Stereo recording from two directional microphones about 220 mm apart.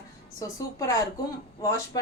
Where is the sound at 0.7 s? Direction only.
15° left (ahead or behind).